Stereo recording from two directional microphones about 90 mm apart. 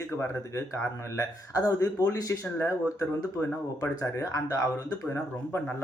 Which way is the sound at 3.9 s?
35° left (ahead or behind).